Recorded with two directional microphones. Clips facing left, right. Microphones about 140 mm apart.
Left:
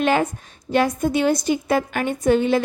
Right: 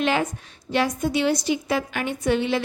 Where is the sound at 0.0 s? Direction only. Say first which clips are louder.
Left 3 dB; 45° left (ahead or behind).